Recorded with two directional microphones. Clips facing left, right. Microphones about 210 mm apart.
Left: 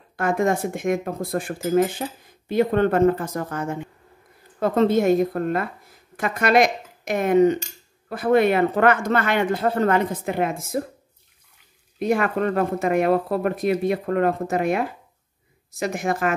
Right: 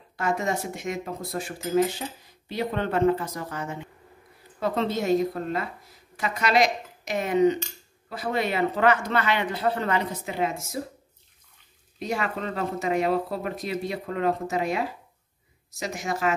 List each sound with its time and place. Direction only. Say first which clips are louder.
0.1 s speech: left 6 dB; 55° left (ahead or behind)
12.0 s speech: left 8 dB; 55° left (ahead or behind)